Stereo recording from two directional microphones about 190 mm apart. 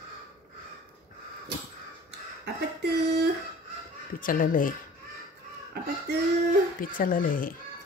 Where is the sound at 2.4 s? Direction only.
60° right (ahead or behind).